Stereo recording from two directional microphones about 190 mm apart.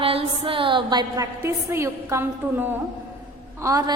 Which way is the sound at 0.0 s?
30° right (ahead or behind).